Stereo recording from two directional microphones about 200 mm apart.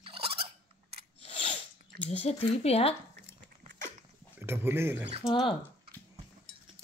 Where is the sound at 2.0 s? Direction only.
30° left (ahead or behind).